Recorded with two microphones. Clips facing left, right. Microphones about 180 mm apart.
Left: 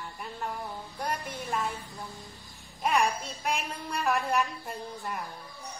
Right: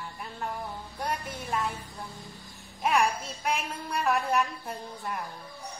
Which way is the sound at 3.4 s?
Centre (ahead or behind).